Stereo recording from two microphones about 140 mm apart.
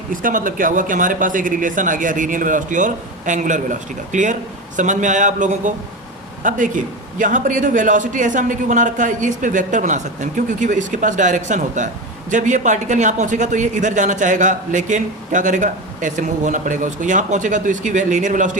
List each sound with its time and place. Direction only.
0.1 s a man's voice: 75° right (ahead or behind)